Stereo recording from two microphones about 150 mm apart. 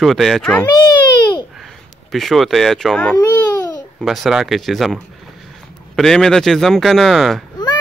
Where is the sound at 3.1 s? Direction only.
25° left (ahead or behind).